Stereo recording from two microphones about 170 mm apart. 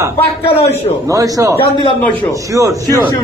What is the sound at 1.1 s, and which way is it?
A man's voice, 20° right (ahead or behind).